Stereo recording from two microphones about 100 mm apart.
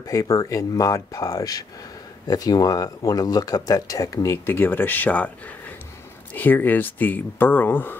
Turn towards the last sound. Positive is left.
turn(degrees=20)  # may be behind; listen again after turning